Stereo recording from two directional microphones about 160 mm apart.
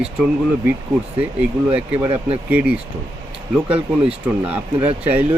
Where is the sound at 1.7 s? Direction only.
10° right (ahead or behind).